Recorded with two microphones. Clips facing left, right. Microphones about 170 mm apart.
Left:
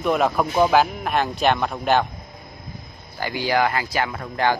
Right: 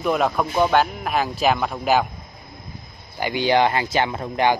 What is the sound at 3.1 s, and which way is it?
Speech, 20° right (ahead or behind).